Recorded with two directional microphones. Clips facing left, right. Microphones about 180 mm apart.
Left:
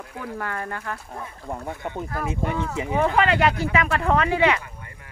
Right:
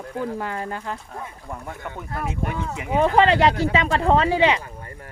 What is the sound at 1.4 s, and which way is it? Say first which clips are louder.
Speech: left 7 dB; 25° left (ahead or behind).